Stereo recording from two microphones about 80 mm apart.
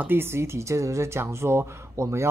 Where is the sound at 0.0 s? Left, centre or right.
Right.